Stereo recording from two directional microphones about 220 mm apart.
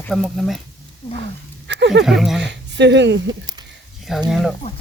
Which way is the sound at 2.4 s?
50° right (ahead or behind).